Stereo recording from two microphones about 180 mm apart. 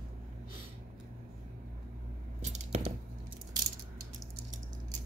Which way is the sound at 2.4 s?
40° right (ahead or behind).